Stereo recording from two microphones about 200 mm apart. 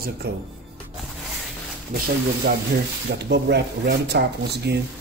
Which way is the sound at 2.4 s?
50° right (ahead or behind).